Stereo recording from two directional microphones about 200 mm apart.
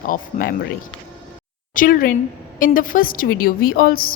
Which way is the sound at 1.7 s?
45° left (ahead or behind).